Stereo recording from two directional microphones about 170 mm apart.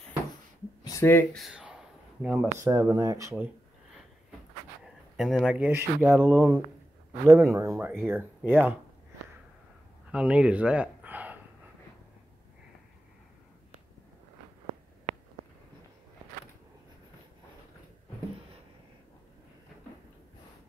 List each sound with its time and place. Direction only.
0.8 s speech: 15° left (ahead or behind)
1.4 s a sound: 5° right (ahead or behind)
2.7 s speech: 20° right (ahead or behind)
5.1 s speech: centre (ahead or behind)
10.1 s speech: 5° right (ahead or behind)